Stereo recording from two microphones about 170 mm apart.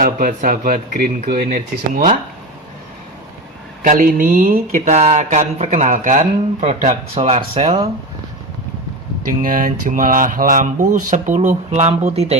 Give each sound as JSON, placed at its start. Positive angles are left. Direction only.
{"t": 0.0, "sound": "speech", "side_deg": -55}
{"t": 3.8, "sound": "speech", "side_deg": -55}
{"t": 9.4, "sound": "speech", "side_deg": -55}